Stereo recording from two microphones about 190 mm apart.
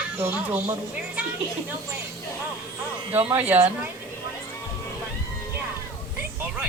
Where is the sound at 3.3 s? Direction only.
10° right (ahead or behind).